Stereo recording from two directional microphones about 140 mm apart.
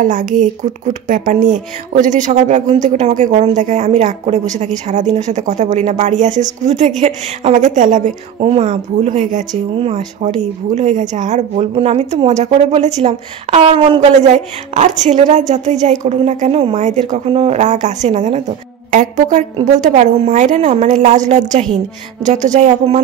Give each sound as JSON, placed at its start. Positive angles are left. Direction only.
{"t": 0.0, "sound": "a woman's voice", "side_deg": -65}
{"t": 8.4, "sound": "speech", "side_deg": -45}
{"t": 9.5, "sound": "speech", "side_deg": -45}
{"t": 14.2, "sound": "speech", "side_deg": -55}